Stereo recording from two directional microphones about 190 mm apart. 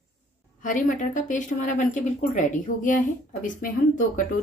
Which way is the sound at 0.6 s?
45° left (ahead or behind).